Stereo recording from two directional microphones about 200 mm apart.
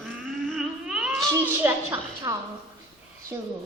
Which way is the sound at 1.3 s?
15° right (ahead or behind).